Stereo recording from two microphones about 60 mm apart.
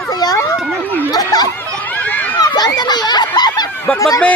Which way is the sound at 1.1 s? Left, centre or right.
Left.